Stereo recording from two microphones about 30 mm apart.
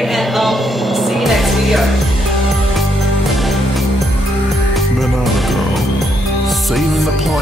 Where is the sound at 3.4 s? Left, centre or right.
Centre.